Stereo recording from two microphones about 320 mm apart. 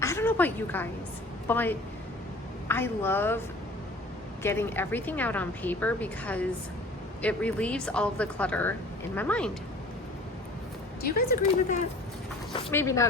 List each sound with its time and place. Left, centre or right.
0.0 s a woman's voice: centre
4.4 s a woman's voice: centre
11.0 s speech: left
12.5 s a woman's voice: centre